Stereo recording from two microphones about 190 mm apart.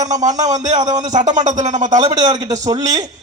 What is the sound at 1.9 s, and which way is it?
Speech, 20° right (ahead or behind).